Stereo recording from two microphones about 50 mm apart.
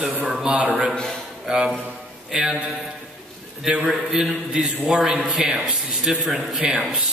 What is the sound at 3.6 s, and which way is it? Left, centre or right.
A man's voice, centre.